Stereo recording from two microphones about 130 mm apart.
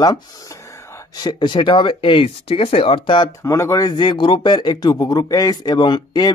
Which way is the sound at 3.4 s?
25° left (ahead or behind).